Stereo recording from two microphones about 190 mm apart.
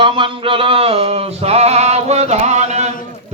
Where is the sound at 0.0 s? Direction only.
25° right (ahead or behind).